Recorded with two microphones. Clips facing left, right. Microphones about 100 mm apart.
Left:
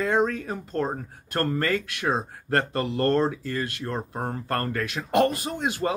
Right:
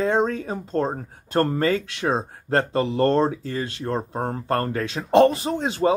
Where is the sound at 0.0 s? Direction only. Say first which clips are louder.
Right 2 dB; 25° right (ahead or behind).